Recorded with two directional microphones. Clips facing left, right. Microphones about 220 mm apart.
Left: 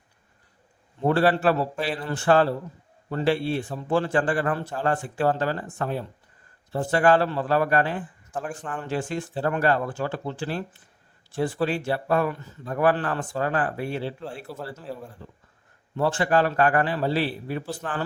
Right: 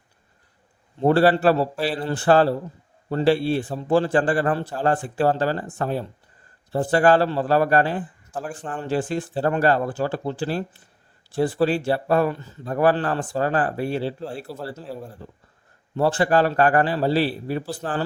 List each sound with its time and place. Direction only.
0.9 s speech: 35° right (ahead or behind)
8.3 s speech: centre (ahead or behind)
8.5 s speech: 30° right (ahead or behind)